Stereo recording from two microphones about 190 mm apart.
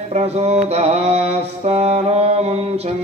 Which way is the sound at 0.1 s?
35° right (ahead or behind).